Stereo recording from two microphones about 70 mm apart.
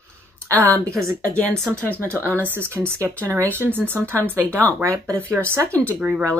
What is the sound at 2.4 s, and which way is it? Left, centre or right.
Speech, right.